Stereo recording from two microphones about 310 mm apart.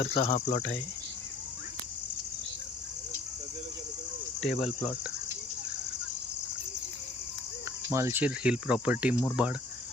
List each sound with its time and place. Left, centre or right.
0.1 s cricket: left
4.4 s speech: centre
7.9 s speech: centre